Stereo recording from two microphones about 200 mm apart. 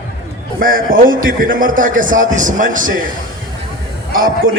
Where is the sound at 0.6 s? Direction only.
45° right (ahead or behind).